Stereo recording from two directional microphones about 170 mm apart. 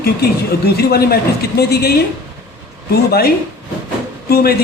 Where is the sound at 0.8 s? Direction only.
65° left (ahead or behind).